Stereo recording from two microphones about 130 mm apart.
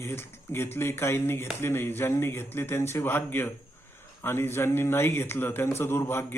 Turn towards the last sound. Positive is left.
turn(degrees=20)  # may be behind; listen again after turning